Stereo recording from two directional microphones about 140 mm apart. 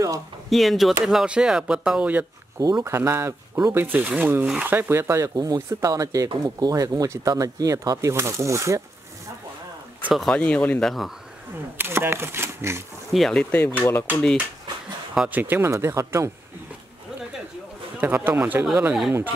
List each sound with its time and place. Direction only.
0.5 s speech: centre (ahead or behind)
2.6 s speech: 25° right (ahead or behind)
10.0 s speech: centre (ahead or behind)
11.8 s speech: 15° right (ahead or behind)
13.1 s speech: 5° left (ahead or behind)
15.1 s speech: 10° right (ahead or behind)
18.0 s speech: 15° right (ahead or behind)